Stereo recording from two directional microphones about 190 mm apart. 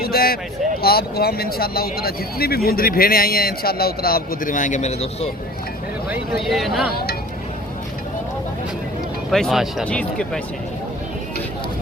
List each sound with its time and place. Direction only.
0.0 s a sound: 50° left (ahead or behind)
0.8 s speech: 55° left (ahead or behind); by 5.3 s 35° left (ahead or behind)
6.1 s speech: centre (ahead or behind)
6.9 s speech: 55° left (ahead or behind)
9.3 s speech: centre (ahead or behind)